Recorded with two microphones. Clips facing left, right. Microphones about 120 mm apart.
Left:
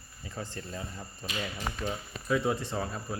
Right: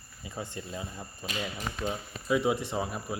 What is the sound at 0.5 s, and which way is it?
Speech, 15° right (ahead or behind).